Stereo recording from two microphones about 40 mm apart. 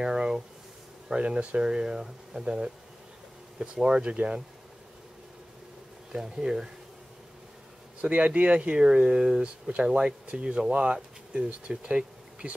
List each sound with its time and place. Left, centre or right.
0.0 s a sound: centre
1.2 s speech: right
6.1 s speech: centre
8.0 s a man's voice: right